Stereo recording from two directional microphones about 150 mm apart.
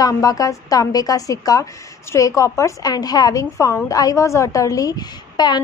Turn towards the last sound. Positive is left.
turn(degrees=25)  # may be behind; listen again after turning